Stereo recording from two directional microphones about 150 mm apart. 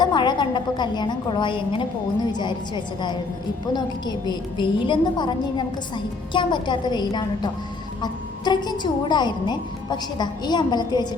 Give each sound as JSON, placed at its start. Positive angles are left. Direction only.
{"t": 0.0, "sound": "a woman's voice", "side_deg": 30}